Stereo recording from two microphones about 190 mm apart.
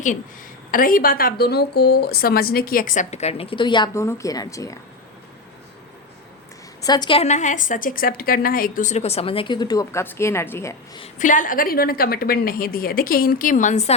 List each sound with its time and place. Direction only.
0.7 s a woman's voice: 45° left (ahead or behind); by 4.8 s 15° left (ahead or behind)
6.8 s a woman's voice: 20° left (ahead or behind)
11.0 s a woman's voice: 40° left (ahead or behind)